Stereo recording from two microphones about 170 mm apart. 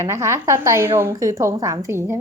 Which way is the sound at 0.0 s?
15° right (ahead or behind).